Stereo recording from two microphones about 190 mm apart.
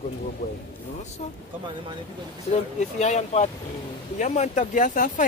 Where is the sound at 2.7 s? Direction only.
35° left (ahead or behind).